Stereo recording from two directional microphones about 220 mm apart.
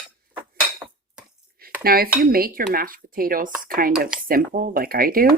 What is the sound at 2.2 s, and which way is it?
Speech, 40° right (ahead or behind).